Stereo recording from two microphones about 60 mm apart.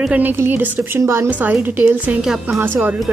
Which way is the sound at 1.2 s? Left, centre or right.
Right.